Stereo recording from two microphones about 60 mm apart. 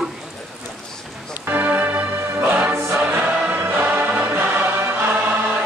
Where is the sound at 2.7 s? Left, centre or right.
Right.